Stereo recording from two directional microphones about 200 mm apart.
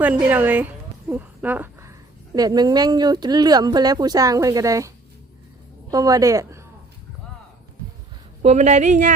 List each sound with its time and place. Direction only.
0.0 s a woman's voice: 10° right (ahead or behind)
5.9 s speech: 15° right (ahead or behind)
8.4 s speech: 35° right (ahead or behind)